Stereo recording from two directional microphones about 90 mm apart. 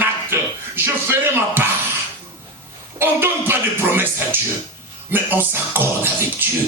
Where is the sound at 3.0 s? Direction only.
25° right (ahead or behind).